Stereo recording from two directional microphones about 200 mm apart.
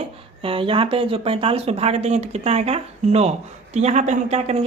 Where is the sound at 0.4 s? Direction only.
25° right (ahead or behind).